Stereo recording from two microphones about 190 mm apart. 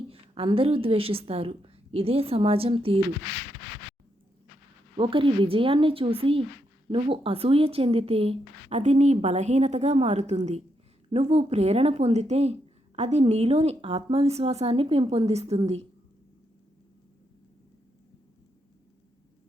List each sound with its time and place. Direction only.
0.1 s a woman's voice: 30° right (ahead or behind)
4.9 s a woman's voice: 25° right (ahead or behind)